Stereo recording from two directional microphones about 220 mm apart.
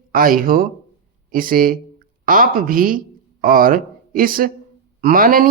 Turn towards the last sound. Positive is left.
turn(degrees=-40)  # may be behind; listen again after turning